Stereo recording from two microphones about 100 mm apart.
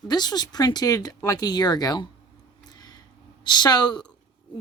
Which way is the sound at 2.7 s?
40° left (ahead or behind).